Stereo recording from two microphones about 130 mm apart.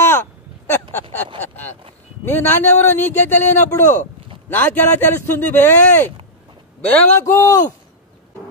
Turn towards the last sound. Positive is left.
turn(degrees=25)  # may be behind; listen again after turning